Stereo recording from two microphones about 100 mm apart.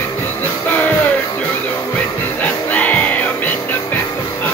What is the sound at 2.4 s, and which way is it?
Music, 15° left (ahead or behind).